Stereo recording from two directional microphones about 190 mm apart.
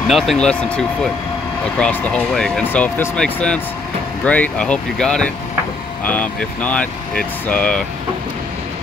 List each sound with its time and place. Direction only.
0.1 s speech: centre (ahead or behind)